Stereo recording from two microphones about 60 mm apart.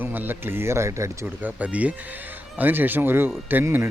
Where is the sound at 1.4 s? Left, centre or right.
Right.